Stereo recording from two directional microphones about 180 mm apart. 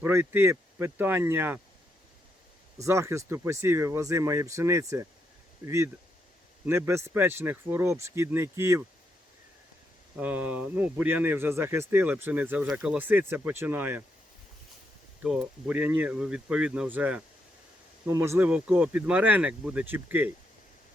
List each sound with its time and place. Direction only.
0.0 s speech: 15° right (ahead or behind)
2.7 s speech: 15° right (ahead or behind)
10.2 s speech: 10° right (ahead or behind)
15.2 s speech: 5° right (ahead or behind)